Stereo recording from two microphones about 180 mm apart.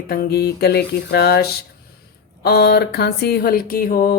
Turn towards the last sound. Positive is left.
turn(degrees=50)  # may be behind; listen again after turning